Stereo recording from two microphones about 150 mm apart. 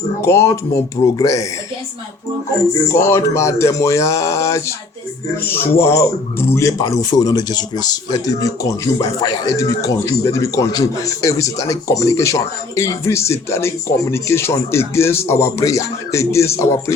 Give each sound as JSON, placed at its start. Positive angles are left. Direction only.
{"t": 0.2, "sound": "speech", "side_deg": 20}
{"t": 2.9, "sound": "speech", "side_deg": 20}